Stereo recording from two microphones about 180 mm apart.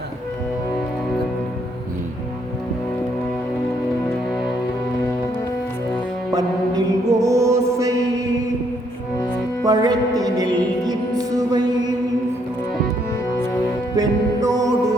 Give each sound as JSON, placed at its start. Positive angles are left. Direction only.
{"t": 6.3, "sound": "music", "side_deg": -20}
{"t": 9.6, "sound": "music", "side_deg": -20}
{"t": 13.9, "sound": "music", "side_deg": -20}